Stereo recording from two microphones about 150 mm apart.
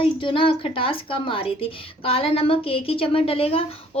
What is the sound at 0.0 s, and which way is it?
A woman's voice, 35° left (ahead or behind).